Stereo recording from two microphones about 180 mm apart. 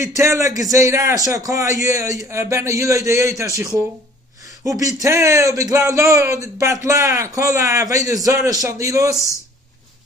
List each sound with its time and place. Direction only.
0.0 s a man's voice: 15° right (ahead or behind)